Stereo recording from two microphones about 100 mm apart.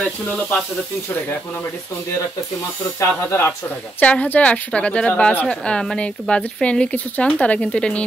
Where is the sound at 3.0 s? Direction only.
25° left (ahead or behind).